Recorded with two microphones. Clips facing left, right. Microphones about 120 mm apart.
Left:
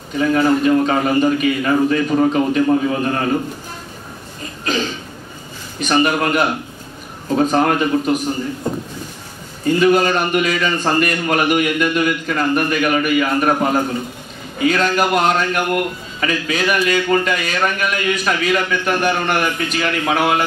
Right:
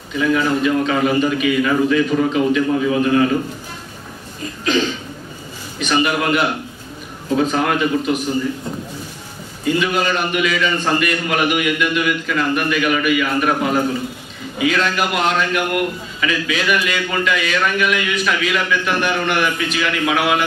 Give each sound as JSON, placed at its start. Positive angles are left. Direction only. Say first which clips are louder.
{"t": 0.1, "sound": "a man's voice", "louder": "left 2 dB", "side_deg": 40}
{"t": 5.8, "sound": "a man's voice", "louder": "left 2 dB", "side_deg": 45}
{"t": 9.7, "sound": "a man's voice", "louder": "left 4 dB", "side_deg": 45}